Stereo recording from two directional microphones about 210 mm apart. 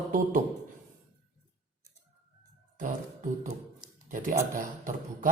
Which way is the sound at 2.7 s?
35° right (ahead or behind).